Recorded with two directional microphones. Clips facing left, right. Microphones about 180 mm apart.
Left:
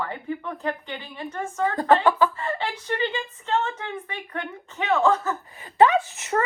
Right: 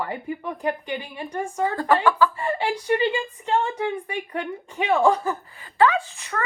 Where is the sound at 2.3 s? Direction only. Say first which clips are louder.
Right 4 dB; 15° right (ahead or behind).